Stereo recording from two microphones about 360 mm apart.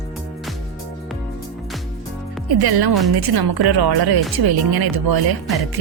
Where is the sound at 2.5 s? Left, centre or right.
Right.